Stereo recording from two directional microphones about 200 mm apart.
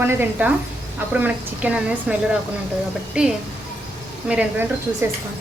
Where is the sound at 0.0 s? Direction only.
10° right (ahead or behind).